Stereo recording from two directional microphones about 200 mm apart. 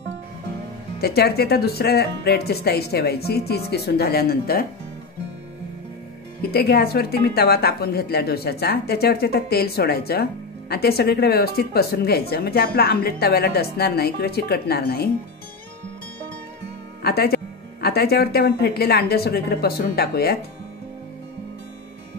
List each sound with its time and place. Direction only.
1.0 s speech: 50° left (ahead or behind)
6.5 s speech: 50° left (ahead or behind)
17.0 s speech: 50° left (ahead or behind)